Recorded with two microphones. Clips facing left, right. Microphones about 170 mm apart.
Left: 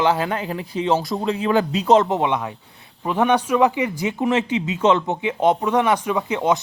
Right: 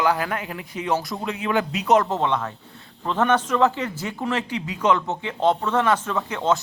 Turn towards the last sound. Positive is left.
turn(degrees=15)  # may be behind; listen again after turning